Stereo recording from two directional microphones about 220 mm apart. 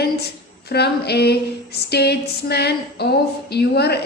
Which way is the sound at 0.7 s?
45° left (ahead or behind).